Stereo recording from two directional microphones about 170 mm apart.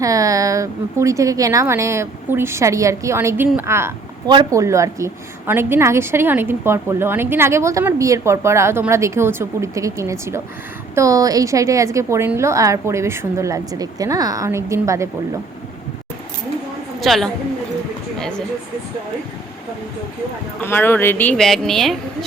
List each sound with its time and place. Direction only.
0.0 s a woman's voice: 20° right (ahead or behind)
17.0 s a woman's voice: centre (ahead or behind)
18.2 s a sound: 5° left (ahead or behind)
20.6 s a woman's voice: 10° left (ahead or behind)